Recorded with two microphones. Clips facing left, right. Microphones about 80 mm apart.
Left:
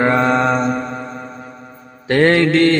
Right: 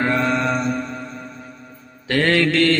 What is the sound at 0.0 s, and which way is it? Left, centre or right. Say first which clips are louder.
Mantra: left 5 dB; left.